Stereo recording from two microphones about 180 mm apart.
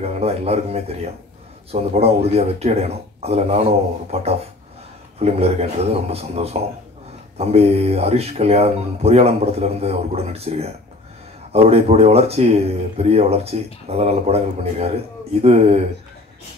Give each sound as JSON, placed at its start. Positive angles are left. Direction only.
{"t": 0.0, "sound": "speech", "side_deg": -35}